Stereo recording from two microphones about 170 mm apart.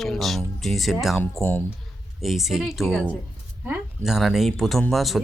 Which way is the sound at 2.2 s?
Centre (ahead or behind).